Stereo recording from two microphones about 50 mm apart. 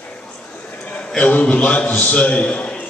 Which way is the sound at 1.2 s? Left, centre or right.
Left.